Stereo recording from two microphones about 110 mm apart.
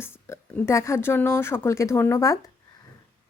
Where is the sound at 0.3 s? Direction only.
25° left (ahead or behind).